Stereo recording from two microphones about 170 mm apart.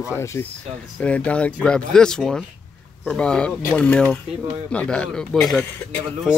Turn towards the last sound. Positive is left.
turn(degrees=0)  # may be behind; listen again after turning